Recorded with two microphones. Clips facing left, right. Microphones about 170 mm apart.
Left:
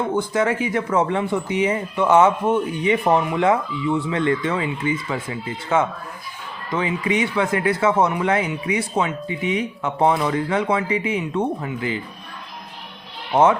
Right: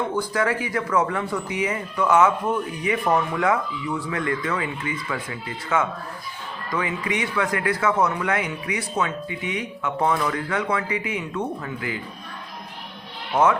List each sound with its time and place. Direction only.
0.1 s speech: 25° left (ahead or behind)
13.3 s speech: 30° left (ahead or behind)